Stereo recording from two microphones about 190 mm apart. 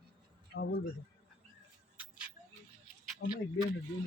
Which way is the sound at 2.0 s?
5° right (ahead or behind).